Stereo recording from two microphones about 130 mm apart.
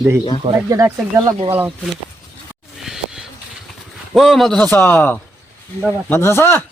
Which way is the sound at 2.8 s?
5° right (ahead or behind).